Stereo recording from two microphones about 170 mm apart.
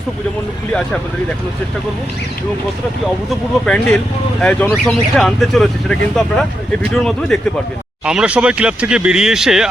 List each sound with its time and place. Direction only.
3.7 s speech: 5° left (ahead or behind)